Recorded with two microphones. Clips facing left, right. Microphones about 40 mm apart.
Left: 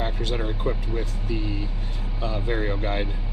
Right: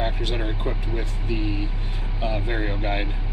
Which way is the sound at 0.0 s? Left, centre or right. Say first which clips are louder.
Right 1 dB; right.